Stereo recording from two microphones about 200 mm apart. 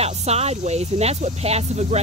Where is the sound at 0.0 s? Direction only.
30° right (ahead or behind).